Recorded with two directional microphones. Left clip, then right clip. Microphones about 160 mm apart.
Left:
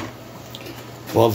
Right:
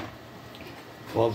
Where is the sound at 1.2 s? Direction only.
50° left (ahead or behind).